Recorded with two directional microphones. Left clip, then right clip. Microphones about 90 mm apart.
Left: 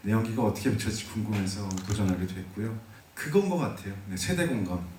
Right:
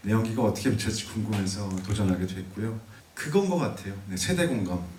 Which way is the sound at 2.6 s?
25° right (ahead or behind).